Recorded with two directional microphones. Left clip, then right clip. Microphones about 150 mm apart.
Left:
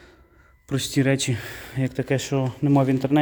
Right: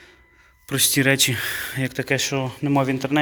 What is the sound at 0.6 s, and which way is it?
Speech, 10° left (ahead or behind).